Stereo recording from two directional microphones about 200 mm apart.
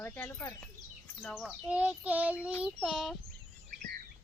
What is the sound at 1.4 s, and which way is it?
Child singing, 5° right (ahead or behind).